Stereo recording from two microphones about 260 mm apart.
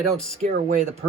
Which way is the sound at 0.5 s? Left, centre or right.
Right.